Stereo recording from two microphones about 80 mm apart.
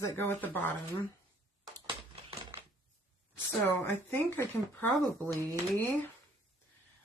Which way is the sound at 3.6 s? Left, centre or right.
Left.